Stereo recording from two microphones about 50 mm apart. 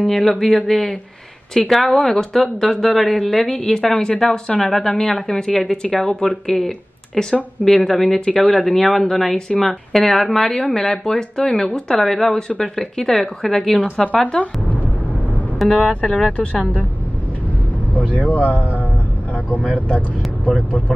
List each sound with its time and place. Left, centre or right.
0.1 s a woman's voice: centre
14.0 s speech: left
15.7 s speech: left
18.0 s speech: left